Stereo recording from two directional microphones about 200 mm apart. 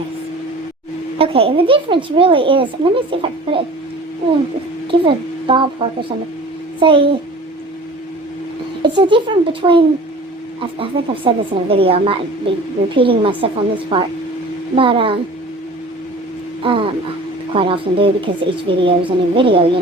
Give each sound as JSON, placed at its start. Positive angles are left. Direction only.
{"t": 1.2, "sound": "speech", "side_deg": -30}
{"t": 4.9, "sound": "a child's voice", "side_deg": -25}
{"t": 8.8, "sound": "speech", "side_deg": -25}
{"t": 16.6, "sound": "speech", "side_deg": -25}